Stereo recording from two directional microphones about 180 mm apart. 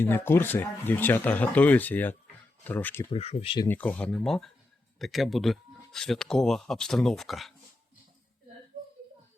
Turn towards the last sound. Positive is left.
turn(degrees=0)  # may be behind; listen again after turning